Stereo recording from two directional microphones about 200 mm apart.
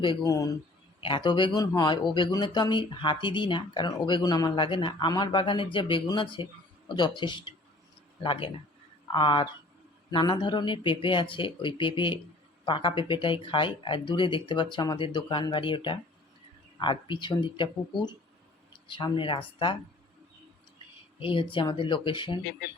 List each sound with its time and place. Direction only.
0.0 s speech: 20° left (ahead or behind)
21.2 s speech: 25° left (ahead or behind)